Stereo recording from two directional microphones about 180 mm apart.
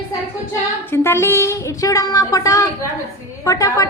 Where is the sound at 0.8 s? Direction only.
15° left (ahead or behind).